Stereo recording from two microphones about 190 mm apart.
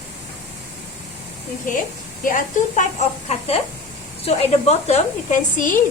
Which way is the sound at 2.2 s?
45° left (ahead or behind).